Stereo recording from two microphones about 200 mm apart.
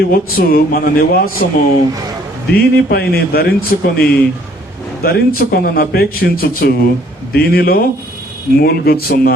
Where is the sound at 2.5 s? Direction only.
50° left (ahead or behind).